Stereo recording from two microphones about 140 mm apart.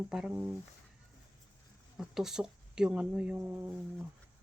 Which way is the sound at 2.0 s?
5° right (ahead or behind).